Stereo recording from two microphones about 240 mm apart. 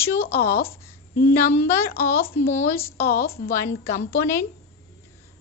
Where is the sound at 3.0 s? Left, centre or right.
Left.